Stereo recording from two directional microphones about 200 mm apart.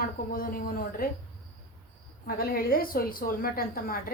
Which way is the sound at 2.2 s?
45° left (ahead or behind).